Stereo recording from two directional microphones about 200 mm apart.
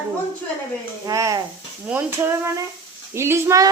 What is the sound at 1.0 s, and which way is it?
Speech, 15° right (ahead or behind).